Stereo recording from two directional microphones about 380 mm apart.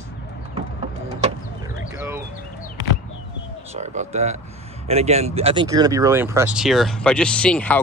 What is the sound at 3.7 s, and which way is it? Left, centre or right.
Speech, centre.